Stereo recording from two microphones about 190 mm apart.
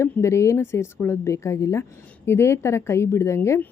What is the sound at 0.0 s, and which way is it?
A woman's voice, 15° left (ahead or behind).